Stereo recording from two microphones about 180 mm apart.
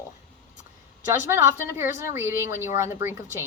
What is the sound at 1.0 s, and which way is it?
A woman's voice, 15° right (ahead or behind).